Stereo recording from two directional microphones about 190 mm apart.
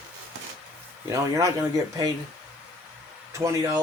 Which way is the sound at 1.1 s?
15° right (ahead or behind).